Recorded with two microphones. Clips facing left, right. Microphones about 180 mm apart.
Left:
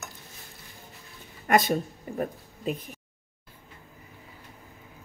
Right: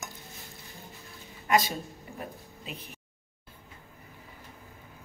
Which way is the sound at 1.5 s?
55° left (ahead or behind).